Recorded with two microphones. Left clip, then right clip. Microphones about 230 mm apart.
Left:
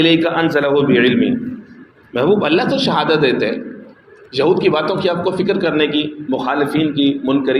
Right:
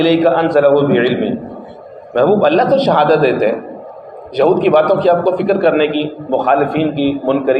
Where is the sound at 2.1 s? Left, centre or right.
Left.